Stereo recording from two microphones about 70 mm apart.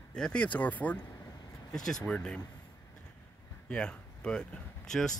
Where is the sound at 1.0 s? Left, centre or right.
Left.